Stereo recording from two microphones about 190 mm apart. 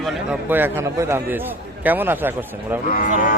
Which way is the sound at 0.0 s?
5° right (ahead or behind).